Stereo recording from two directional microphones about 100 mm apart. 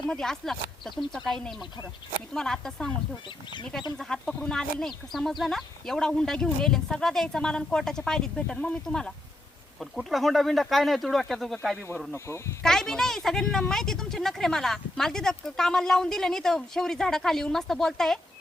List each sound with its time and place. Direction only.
0.1 s speech: 5° left (ahead or behind)
3.9 s speech: 5° left (ahead or behind)
12.1 s speech: 25° left (ahead or behind)
12.6 s speech: 5° left (ahead or behind)